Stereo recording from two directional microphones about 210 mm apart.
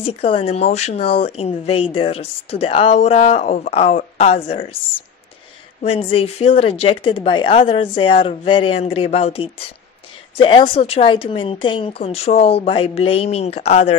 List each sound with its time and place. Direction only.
0.0 s speech: 25° left (ahead or behind)
5.8 s speech: 25° left (ahead or behind)